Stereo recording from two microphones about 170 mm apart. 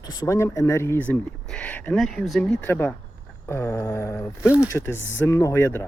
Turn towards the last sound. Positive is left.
turn(degrees=15)  # may be behind; listen again after turning